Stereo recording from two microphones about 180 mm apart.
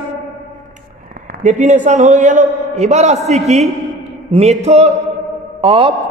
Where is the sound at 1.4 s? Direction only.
40° right (ahead or behind).